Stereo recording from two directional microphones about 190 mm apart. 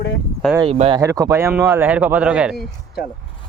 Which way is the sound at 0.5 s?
30° right (ahead or behind).